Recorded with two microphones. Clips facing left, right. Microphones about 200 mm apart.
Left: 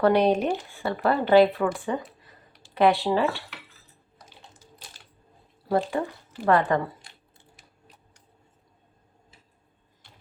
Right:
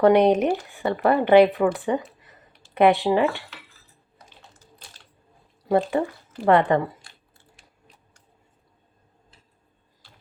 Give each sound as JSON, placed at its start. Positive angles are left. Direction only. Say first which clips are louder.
{"t": 0.0, "sound": "speech", "louder": "right 4 dB", "side_deg": -20}
{"t": 5.6, "sound": "speech", "louder": "right 4 dB", "side_deg": -20}